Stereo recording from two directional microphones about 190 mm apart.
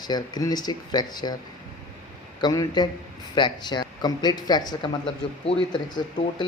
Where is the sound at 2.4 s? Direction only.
20° left (ahead or behind).